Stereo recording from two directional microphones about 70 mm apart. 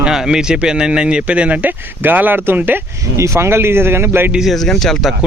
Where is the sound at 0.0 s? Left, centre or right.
Centre; by 2.8 s right.